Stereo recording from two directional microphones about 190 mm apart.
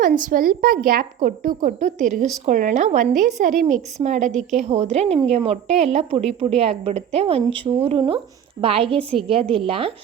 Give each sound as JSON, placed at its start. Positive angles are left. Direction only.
{"t": 0.0, "sound": "a woman's voice", "side_deg": -45}